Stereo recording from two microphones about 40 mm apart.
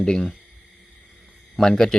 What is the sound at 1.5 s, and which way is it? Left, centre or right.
Speech, centre.